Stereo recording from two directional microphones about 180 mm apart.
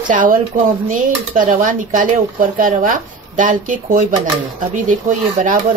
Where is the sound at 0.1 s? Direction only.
50° right (ahead or behind).